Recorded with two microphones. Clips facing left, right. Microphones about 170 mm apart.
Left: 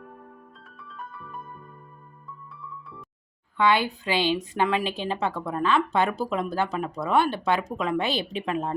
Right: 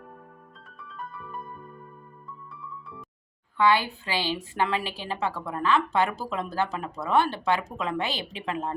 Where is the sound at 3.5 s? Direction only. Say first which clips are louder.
Even; 20° left (ahead or behind).